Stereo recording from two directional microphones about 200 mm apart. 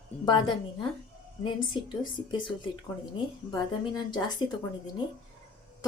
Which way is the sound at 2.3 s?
25° left (ahead or behind).